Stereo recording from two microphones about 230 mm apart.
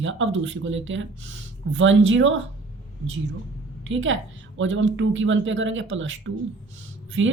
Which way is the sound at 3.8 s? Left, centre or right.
Right.